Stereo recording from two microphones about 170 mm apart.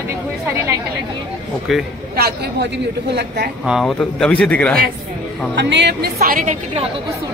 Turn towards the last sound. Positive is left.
turn(degrees=-55)  # may be behind; listen again after turning